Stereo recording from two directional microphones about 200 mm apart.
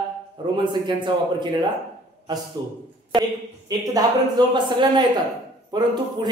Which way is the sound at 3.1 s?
20° right (ahead or behind).